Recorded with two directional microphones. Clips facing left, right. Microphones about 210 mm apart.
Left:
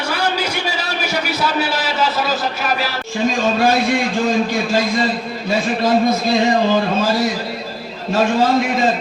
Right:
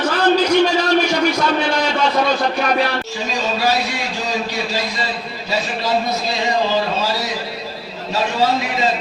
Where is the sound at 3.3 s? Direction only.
50° left (ahead or behind).